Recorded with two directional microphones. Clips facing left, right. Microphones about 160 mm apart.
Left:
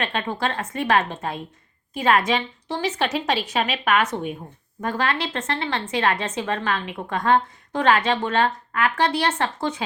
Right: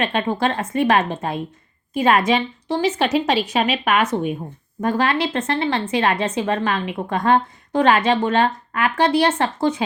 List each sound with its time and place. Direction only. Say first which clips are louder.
0.0 s a woman's voice: right 5 dB; 15° right (ahead or behind)